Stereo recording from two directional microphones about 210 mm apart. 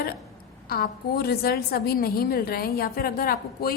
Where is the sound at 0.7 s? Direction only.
45° left (ahead or behind).